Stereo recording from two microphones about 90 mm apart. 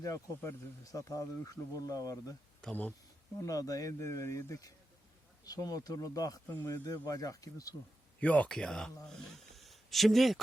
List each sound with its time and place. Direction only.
0.0 s speech: 40° left (ahead or behind)
2.6 s speech: 15° left (ahead or behind)
3.4 s speech: 40° left (ahead or behind)
8.2 s speech: 15° left (ahead or behind)